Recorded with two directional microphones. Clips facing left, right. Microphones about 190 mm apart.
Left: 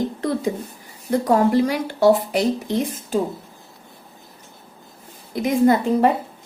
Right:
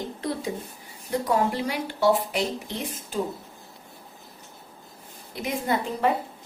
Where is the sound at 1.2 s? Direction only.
45° left (ahead or behind).